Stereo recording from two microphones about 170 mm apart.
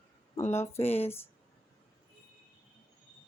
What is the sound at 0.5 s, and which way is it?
Speech, 15° left (ahead or behind).